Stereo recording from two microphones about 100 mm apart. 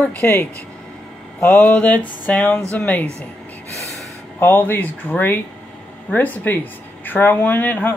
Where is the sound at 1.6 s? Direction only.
10° left (ahead or behind).